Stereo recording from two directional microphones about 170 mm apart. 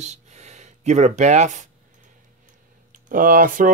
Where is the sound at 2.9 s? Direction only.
55° right (ahead or behind).